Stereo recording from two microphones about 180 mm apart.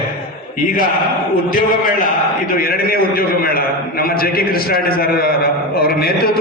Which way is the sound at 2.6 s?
55° left (ahead or behind).